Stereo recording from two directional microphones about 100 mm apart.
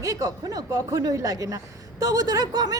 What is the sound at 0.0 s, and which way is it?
Speech, 35° right (ahead or behind).